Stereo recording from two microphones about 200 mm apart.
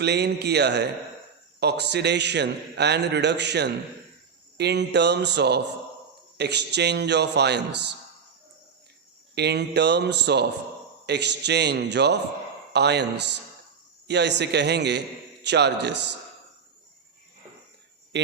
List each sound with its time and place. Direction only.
0.0 s a man's voice: 55° right (ahead or behind)
9.3 s a man's voice: 55° right (ahead or behind)